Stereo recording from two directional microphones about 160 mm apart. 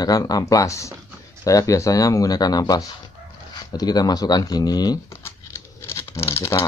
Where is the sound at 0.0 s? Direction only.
25° left (ahead or behind).